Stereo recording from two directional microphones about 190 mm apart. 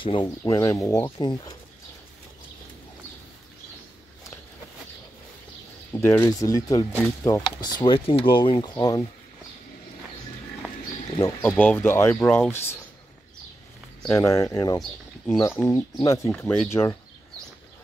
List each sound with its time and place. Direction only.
0.0 s speech: 25° left (ahead or behind)
0.4 s speech: 15° left (ahead or behind)
5.9 s speech: 15° left (ahead or behind)
11.1 s speech: 15° left (ahead or behind)
14.0 s speech: 15° left (ahead or behind)
14.8 s speech: centre (ahead or behind)
15.7 s speech: 15° left (ahead or behind)
16.3 s speech: 5° left (ahead or behind)